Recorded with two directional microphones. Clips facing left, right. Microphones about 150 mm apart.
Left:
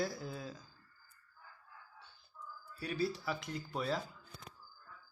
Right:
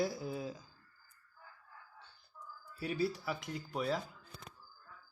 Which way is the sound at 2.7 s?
20° right (ahead or behind).